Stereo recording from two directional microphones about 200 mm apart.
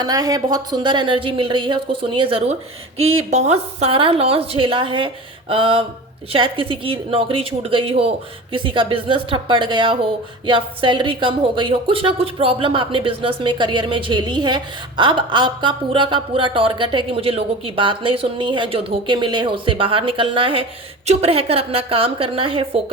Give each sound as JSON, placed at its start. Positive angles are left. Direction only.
{"t": 0.0, "sound": "speech", "side_deg": -20}
{"t": 3.0, "sound": "a woman's voice", "side_deg": -90}
{"t": 3.2, "sound": "speech", "side_deg": -35}